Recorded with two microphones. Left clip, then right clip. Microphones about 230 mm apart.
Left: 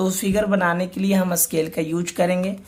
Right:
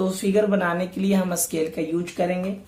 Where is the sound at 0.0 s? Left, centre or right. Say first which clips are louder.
Even; left.